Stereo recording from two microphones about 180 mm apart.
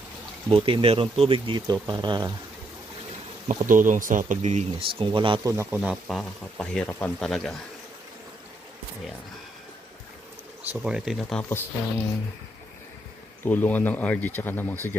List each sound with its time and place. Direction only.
0.5 s speech: 30° right (ahead or behind)
3.4 s speech: 45° right (ahead or behind); by 7.5 s 5° left (ahead or behind)
10.6 s speech: 5° right (ahead or behind)
13.4 s speech: 10° left (ahead or behind)